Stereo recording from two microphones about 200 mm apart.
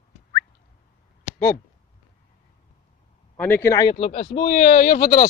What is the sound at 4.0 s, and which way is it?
Speech, 35° left (ahead or behind).